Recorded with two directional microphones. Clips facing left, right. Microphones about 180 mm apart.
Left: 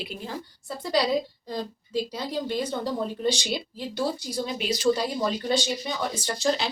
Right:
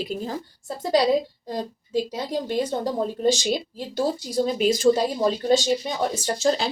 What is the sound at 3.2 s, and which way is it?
Speech, 45° right (ahead or behind).